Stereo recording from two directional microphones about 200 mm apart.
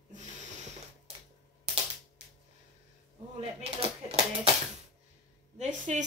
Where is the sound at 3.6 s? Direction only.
30° right (ahead or behind).